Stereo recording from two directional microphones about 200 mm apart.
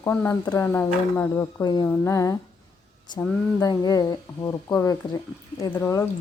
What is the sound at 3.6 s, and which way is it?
Speech, 20° left (ahead or behind).